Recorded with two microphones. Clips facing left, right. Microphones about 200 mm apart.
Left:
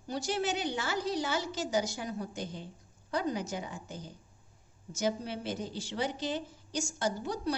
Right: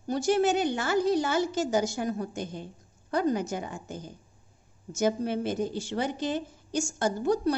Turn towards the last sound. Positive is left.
turn(degrees=-50)  # may be behind; listen again after turning